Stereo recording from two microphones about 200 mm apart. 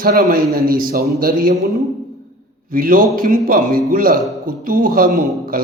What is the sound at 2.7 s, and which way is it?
A man's voice, 45° right (ahead or behind).